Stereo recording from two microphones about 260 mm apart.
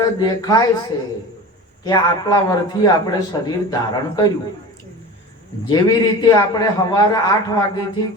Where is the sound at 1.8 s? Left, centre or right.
Centre.